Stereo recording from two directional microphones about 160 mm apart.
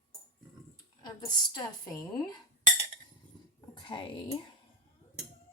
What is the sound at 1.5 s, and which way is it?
Speech, 25° left (ahead or behind).